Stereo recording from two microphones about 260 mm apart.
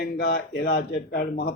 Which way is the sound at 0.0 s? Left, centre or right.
Left.